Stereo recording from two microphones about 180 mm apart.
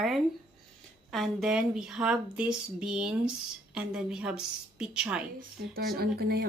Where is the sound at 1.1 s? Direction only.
Centre (ahead or behind).